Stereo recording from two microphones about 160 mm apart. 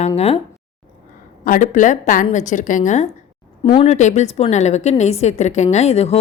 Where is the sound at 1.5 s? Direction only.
55° left (ahead or behind).